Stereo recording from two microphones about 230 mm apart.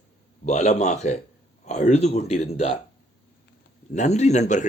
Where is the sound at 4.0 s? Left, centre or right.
Left.